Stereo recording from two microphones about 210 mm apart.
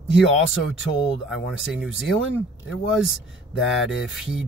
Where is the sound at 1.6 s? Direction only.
Centre (ahead or behind).